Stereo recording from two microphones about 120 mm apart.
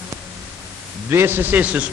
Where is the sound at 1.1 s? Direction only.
20° right (ahead or behind).